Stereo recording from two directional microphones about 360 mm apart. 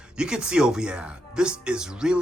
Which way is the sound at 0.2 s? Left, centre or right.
Centre.